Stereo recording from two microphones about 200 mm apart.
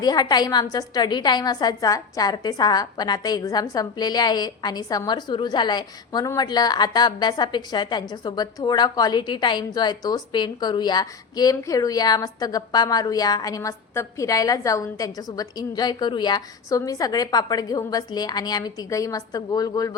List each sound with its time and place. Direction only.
0.0 s a woman's voice: 20° left (ahead or behind)